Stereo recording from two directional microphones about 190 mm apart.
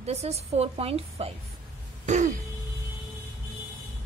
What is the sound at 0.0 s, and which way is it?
A woman's voice, 35° right (ahead or behind).